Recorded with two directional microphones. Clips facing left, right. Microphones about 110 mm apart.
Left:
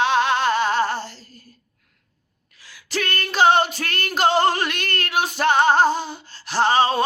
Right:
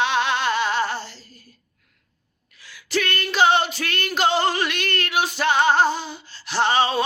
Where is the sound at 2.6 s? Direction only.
35° left (ahead or behind).